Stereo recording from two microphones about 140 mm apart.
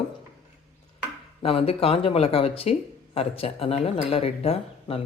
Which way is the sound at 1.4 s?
45° left (ahead or behind).